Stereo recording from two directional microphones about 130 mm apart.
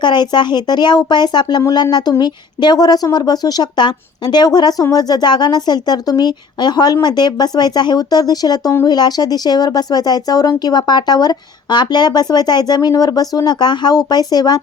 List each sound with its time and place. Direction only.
0.0 s speech: 35° left (ahead or behind)